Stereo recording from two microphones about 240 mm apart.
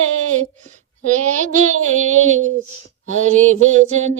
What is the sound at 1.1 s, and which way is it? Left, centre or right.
Child singing, right.